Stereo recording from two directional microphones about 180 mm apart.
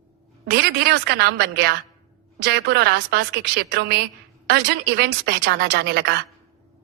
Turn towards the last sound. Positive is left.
turn(degrees=-70)  # may be behind; listen again after turning